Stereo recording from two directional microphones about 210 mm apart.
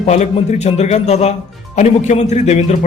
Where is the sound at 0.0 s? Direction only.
30° left (ahead or behind).